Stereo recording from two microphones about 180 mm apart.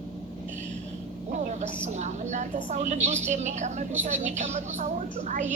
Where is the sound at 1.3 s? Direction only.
40° right (ahead or behind).